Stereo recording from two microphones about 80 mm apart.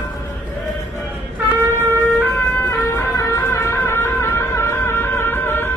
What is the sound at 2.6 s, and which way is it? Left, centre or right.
Music, left.